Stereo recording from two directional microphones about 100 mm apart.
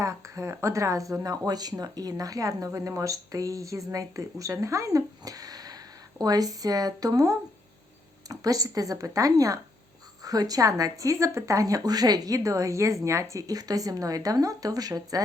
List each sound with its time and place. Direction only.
0.0 s speech: 30° right (ahead or behind)